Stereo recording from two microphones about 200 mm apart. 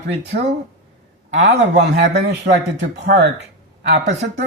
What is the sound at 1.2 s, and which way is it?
Speech, 60° right (ahead or behind).